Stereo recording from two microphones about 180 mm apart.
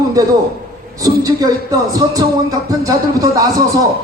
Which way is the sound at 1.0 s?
20° right (ahead or behind).